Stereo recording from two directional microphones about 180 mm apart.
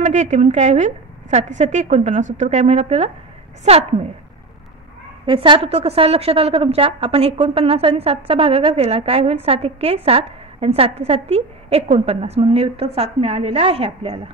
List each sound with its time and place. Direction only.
0.0 s a woman's voice: 40° right (ahead or behind)
5.2 s a woman's voice: 30° right (ahead or behind)